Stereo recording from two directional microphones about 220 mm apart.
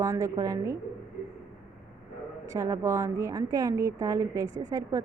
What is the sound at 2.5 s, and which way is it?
A woman's voice, 15° right (ahead or behind).